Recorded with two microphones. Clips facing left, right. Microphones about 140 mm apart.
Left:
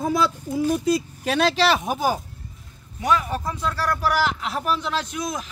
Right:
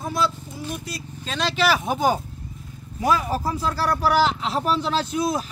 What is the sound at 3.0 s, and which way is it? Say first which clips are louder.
Speech: right 1 dB; 35° right (ahead or behind).